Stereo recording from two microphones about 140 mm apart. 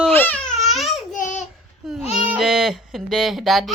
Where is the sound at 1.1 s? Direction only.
65° left (ahead or behind).